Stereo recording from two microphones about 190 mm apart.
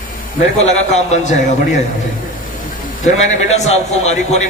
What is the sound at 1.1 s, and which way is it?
Speech, 35° left (ahead or behind).